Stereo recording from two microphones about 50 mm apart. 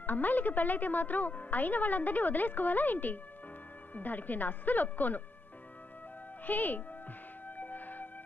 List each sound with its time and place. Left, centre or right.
0.0 s a woman's voice: left
6.4 s speech: left
7.4 s music: left